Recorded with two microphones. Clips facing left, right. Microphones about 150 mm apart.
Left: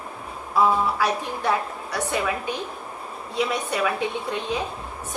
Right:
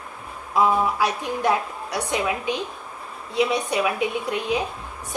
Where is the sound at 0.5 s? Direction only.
15° right (ahead or behind).